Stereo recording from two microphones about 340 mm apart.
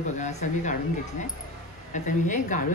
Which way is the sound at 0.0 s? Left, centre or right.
Left.